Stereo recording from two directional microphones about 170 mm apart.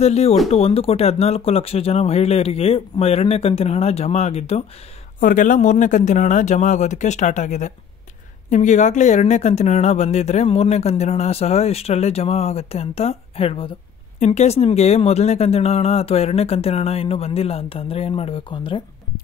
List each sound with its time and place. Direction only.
0.0 s speech: 40° left (ahead or behind)
5.2 s speech: 50° left (ahead or behind); by 18.8 s 30° left (ahead or behind)